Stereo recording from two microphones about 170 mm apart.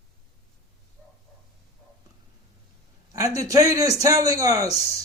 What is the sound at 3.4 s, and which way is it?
Speech, 20° right (ahead or behind).